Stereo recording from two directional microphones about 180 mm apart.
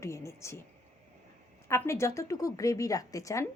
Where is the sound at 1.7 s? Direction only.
15° left (ahead or behind).